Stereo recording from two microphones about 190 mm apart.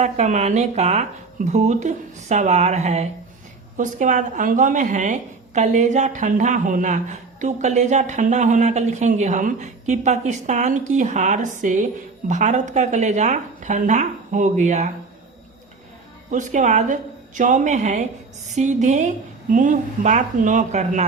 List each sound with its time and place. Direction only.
0.0 s speech: 35° right (ahead or behind)
16.3 s speech: 40° right (ahead or behind)